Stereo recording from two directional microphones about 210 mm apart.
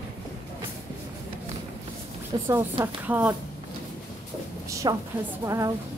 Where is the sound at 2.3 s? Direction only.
20° right (ahead or behind).